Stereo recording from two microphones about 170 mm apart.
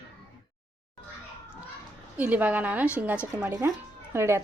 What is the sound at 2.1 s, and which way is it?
A woman's voice, 10° right (ahead or behind).